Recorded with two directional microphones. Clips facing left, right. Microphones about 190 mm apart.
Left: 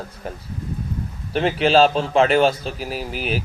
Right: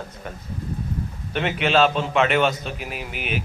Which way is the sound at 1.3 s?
35° left (ahead or behind).